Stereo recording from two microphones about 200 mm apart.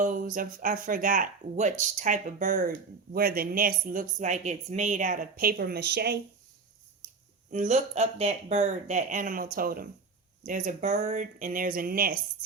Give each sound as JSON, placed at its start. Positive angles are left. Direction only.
{"t": 0.0, "sound": "speech", "side_deg": -40}
{"t": 7.5, "sound": "speech", "side_deg": -35}